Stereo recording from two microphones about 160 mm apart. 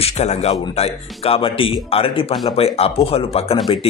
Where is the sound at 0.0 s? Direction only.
40° left (ahead or behind).